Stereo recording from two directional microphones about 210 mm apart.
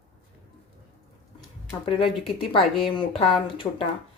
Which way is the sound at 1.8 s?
25° left (ahead or behind).